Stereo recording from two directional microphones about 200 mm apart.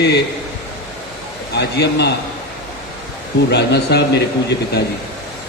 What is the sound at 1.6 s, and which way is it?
Speech, 55° left (ahead or behind).